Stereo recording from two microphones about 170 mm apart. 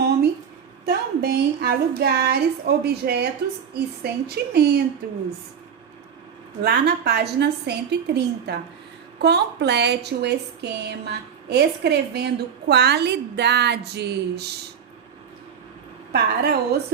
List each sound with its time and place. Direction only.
0.9 s a woman's voice: 65° right (ahead or behind)
6.7 s a woman's voice: 75° right (ahead or behind)
16.1 s a woman's voice: 70° right (ahead or behind)